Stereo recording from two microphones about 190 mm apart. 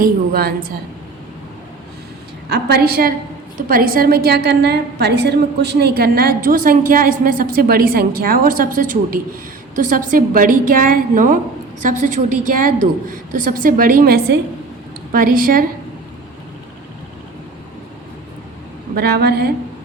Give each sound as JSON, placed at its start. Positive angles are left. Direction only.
{"t": 0.0, "sound": "a woman's voice", "side_deg": -50}
{"t": 2.5, "sound": "a woman's voice", "side_deg": -55}
{"t": 18.9, "sound": "a woman's voice", "side_deg": -55}